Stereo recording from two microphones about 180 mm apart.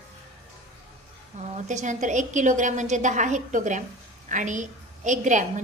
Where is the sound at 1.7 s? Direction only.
45° right (ahead or behind).